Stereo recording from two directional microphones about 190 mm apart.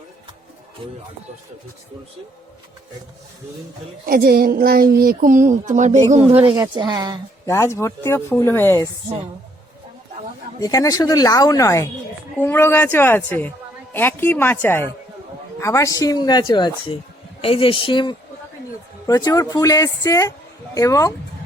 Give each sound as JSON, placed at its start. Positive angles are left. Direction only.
{"t": 4.0, "sound": "speech", "side_deg": -50}
{"t": 6.6, "sound": "speech", "side_deg": -20}
{"t": 7.4, "sound": "speech", "side_deg": 15}
{"t": 10.6, "sound": "a man's voice", "side_deg": 20}